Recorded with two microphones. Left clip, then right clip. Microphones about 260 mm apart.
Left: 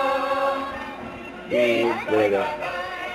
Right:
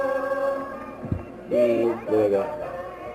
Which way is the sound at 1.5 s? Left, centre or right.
Left.